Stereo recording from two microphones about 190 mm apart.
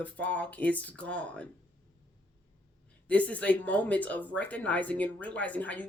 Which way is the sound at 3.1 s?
5° left (ahead or behind).